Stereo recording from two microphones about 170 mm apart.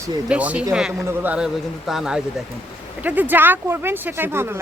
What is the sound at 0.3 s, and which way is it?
Speech, 10° right (ahead or behind).